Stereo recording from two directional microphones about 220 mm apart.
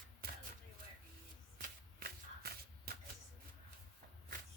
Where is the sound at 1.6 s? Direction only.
45° right (ahead or behind).